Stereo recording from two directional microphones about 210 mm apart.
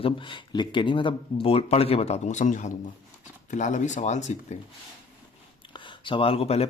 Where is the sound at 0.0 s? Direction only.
25° left (ahead or behind).